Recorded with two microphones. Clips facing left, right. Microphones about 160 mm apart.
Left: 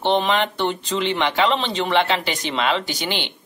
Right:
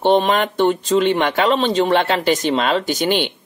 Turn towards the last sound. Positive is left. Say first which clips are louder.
# right 8 dB
turn(degrees=-50)  # may be behind; listen again after turning